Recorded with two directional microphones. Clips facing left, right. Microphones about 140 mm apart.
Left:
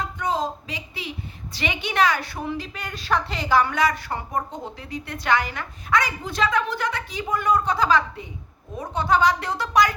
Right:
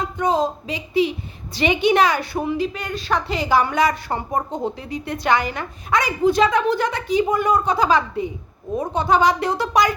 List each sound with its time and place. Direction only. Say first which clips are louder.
0.2 s a woman's voice: right 6 dB; 20° right (ahead or behind)
2.6 s a woman's voice: right 9 dB; 5° left (ahead or behind)
3.6 s a woman's voice: right 3 dB; 15° right (ahead or behind)